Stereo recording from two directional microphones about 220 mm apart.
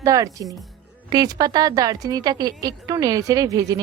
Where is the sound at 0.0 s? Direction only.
15° right (ahead or behind).